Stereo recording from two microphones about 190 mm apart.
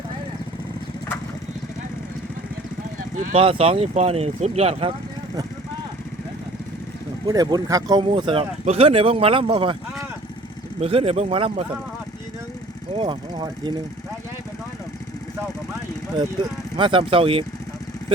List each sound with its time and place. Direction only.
3.3 s speech: 30° right (ahead or behind)
7.3 s speech: 20° right (ahead or behind)
10.8 s speech: 30° right (ahead or behind)
13.0 s speech: 25° right (ahead or behind)
16.7 s speech: 25° right (ahead or behind)